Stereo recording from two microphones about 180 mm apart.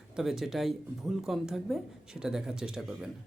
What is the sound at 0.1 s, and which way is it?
Speech, centre (ahead or behind).